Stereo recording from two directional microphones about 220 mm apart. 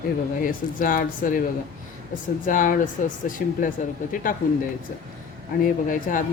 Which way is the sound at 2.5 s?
40° left (ahead or behind).